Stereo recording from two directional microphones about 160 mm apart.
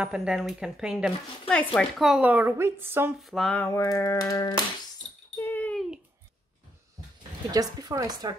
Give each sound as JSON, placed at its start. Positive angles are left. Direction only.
{"t": 0.0, "sound": "speech", "side_deg": -5}
{"t": 3.2, "sound": "speech", "side_deg": 0}
{"t": 3.6, "sound": "a sound", "side_deg": 15}
{"t": 5.4, "sound": "babbling", "side_deg": 10}
{"t": 7.5, "sound": "speech", "side_deg": -25}